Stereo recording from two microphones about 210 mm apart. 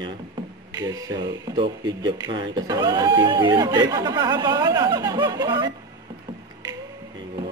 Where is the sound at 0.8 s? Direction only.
15° right (ahead or behind).